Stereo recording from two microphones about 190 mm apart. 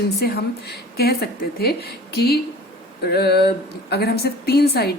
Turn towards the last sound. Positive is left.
turn(degrees=55)  # may be behind; listen again after turning